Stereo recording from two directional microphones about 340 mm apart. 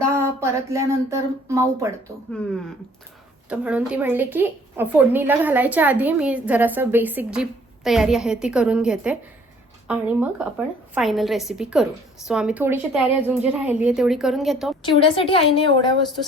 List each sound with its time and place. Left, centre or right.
0.0 s speech: centre
3.5 s a woman's voice: centre
14.8 s a woman's voice: centre